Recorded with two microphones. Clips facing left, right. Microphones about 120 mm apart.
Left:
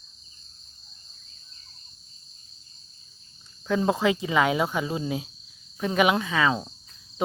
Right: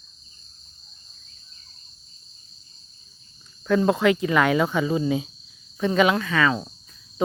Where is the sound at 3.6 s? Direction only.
20° left (ahead or behind).